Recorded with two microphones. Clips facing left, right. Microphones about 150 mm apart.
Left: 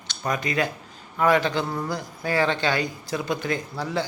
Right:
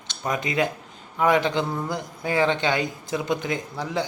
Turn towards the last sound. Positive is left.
turn(degrees=-20)  # may be behind; listen again after turning